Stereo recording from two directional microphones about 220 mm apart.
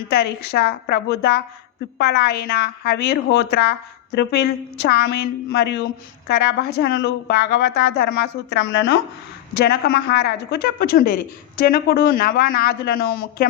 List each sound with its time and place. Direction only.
0.1 s a woman's voice: 45° left (ahead or behind)